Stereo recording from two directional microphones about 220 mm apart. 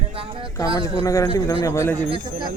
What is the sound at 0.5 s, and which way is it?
Speech, 15° left (ahead or behind).